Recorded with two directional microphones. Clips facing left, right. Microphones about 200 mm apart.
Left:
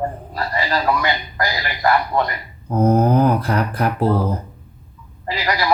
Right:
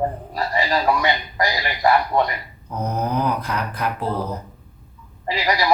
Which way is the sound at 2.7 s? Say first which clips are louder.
Left 8 dB; 55° left (ahead or behind).